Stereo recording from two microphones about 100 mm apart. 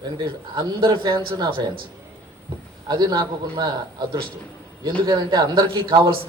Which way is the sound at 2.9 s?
40° right (ahead or behind).